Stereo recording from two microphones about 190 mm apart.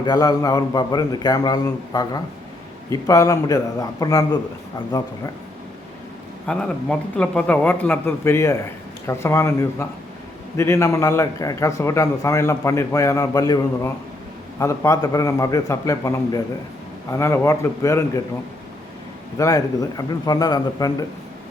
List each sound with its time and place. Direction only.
0.0 s a man's voice: 20° left (ahead or behind)
6.5 s a man's voice: 5° left (ahead or behind)
19.4 s a man's voice: 15° left (ahead or behind)